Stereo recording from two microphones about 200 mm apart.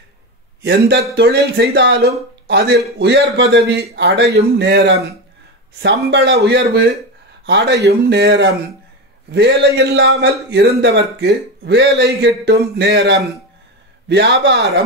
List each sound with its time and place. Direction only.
0.6 s a man's voice: 60° right (ahead or behind)